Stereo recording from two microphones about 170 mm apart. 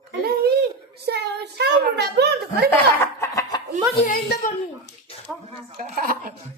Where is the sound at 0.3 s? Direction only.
70° right (ahead or behind).